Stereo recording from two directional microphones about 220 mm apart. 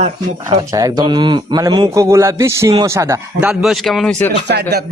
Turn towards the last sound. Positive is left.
turn(degrees=-45)  # may be behind; listen again after turning